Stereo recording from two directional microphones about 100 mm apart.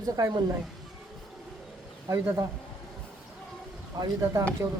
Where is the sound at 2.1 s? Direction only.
35° right (ahead or behind).